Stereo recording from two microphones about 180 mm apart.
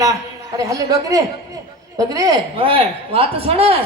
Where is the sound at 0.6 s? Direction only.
20° right (ahead or behind).